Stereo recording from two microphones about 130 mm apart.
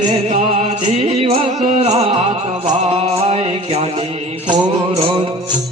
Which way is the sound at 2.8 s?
55° right (ahead or behind).